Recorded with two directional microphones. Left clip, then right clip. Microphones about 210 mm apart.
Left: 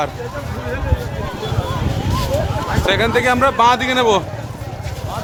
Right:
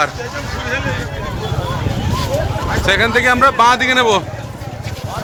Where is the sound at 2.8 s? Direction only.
10° left (ahead or behind).